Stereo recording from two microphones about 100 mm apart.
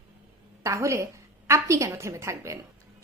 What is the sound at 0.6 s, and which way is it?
A woman's voice, 30° right (ahead or behind).